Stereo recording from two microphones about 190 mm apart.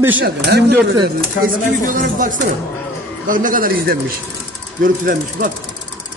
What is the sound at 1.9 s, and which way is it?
A man's voice, 45° right (ahead or behind).